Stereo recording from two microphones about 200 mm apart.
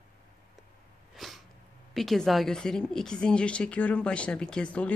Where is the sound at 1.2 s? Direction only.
Centre (ahead or behind).